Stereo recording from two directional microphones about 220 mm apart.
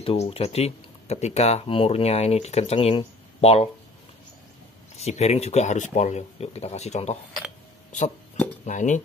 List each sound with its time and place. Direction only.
0.0 s speech: 25° left (ahead or behind)
4.9 s speech: 30° left (ahead or behind)
8.6 s speech: 35° left (ahead or behind)